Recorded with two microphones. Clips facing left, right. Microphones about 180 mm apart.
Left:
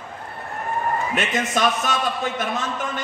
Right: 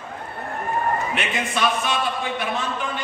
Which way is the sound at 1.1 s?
40° left (ahead or behind).